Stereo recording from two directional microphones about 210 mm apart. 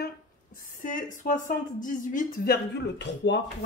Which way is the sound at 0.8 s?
40° left (ahead or behind).